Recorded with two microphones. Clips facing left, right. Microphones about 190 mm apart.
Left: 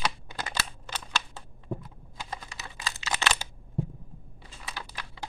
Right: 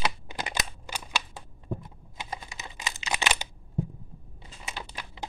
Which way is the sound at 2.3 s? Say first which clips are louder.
Right 1 dB; 20° right (ahead or behind).